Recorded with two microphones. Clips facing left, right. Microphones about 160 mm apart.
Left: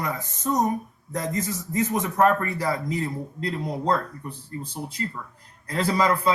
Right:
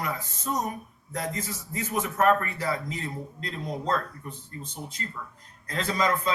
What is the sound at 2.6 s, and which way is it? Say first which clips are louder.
Speech: left 4 dB; 35° left (ahead or behind).